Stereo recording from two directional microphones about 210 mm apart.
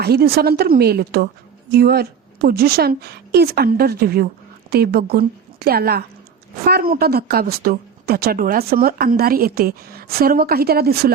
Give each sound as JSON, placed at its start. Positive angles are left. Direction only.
{"t": 0.0, "sound": "a woman's voice", "side_deg": -50}